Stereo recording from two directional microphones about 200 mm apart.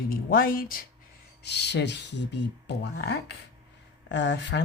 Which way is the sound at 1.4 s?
60° left (ahead or behind).